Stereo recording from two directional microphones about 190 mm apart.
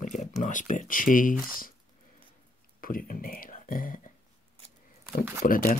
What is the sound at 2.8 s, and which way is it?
Speech, 50° left (ahead or behind).